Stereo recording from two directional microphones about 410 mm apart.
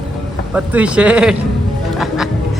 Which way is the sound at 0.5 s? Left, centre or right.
Centre.